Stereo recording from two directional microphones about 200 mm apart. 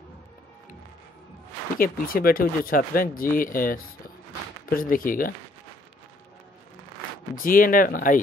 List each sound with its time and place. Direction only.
1.8 s speech: 45° left (ahead or behind)
7.3 s speech: 45° left (ahead or behind)